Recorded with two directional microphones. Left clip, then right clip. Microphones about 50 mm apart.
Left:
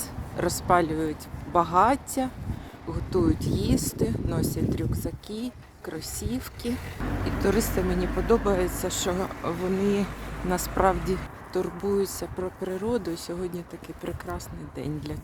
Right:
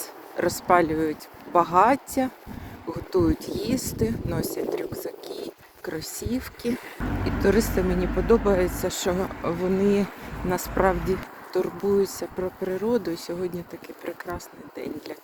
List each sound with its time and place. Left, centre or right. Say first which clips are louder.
0.3 s speech: right 3 dB; centre
0.8 s speech: right 3 dB; right
3.7 s speech: right 2 dB; right
4.9 s speech: right 2 dB; right
7.0 s speech: right 3 dB; centre
9.1 s speech: right 2 dB; centre
9.4 s speech: right 3 dB; centre
10.8 s speech: even; centre
11.5 s speech: right 4 dB; centre